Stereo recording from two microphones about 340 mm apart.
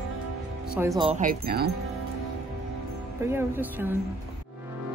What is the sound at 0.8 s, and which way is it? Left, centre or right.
Speech, centre.